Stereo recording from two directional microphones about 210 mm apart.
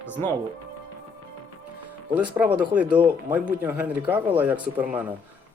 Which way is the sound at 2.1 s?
5° right (ahead or behind).